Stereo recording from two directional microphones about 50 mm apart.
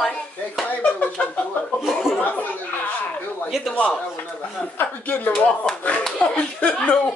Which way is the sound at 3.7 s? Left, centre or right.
Left.